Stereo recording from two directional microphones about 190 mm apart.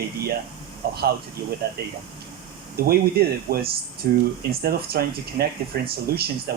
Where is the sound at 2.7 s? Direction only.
50° right (ahead or behind).